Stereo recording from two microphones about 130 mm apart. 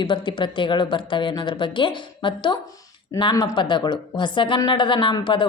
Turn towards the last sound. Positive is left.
turn(degrees=40)  # may be behind; listen again after turning